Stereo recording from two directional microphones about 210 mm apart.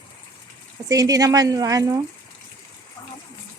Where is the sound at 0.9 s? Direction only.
15° right (ahead or behind).